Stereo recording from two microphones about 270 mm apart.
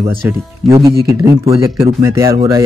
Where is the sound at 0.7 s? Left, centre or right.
Centre.